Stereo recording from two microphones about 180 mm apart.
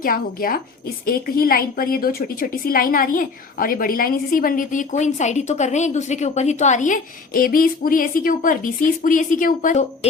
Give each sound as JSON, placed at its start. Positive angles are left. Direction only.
{"t": 0.0, "sound": "a woman's voice", "side_deg": 55}